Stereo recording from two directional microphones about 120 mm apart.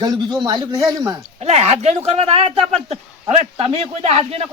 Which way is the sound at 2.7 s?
65° right (ahead or behind).